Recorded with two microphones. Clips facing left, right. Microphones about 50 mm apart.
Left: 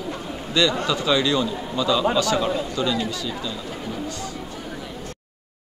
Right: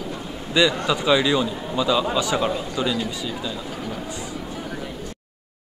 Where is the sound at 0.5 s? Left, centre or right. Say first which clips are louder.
Right 1 dB; centre.